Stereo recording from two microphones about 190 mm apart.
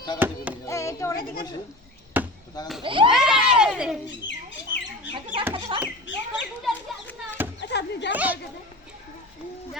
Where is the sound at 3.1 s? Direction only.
5° right (ahead or behind).